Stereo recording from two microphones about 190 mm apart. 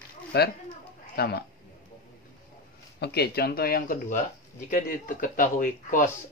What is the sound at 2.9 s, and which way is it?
Speech, 55° left (ahead or behind).